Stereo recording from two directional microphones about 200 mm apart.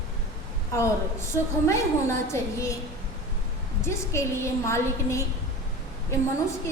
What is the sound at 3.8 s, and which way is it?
A woman's voice, 15° left (ahead or behind).